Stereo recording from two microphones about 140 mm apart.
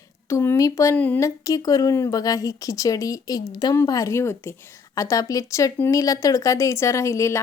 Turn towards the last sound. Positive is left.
turn(degrees=20)  # may be behind; listen again after turning